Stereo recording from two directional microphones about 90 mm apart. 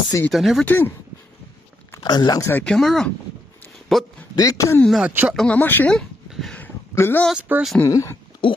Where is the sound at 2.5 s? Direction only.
10° left (ahead or behind).